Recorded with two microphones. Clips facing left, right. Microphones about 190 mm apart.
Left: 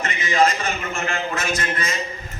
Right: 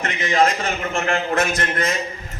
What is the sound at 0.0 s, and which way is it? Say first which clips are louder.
A man's voice: right 1 dB; 55° right (ahead or behind).